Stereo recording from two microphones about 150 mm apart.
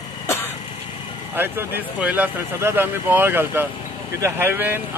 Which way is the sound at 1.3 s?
15° right (ahead or behind).